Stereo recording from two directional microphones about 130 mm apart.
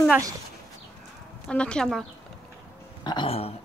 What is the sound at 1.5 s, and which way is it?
Speech, 5° left (ahead or behind).